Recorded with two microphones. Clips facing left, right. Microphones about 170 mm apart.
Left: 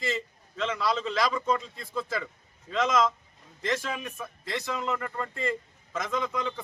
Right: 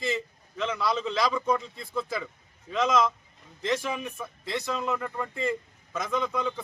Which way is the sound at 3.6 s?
15° right (ahead or behind).